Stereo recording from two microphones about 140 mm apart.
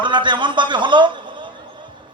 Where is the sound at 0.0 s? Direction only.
35° right (ahead or behind).